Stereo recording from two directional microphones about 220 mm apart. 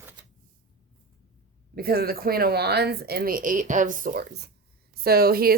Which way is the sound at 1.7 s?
45° right (ahead or behind).